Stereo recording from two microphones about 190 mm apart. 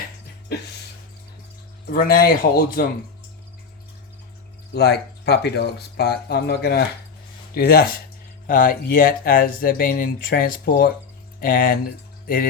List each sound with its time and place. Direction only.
1.9 s speech: 50° left (ahead or behind)
4.7 s speech: 60° left (ahead or behind)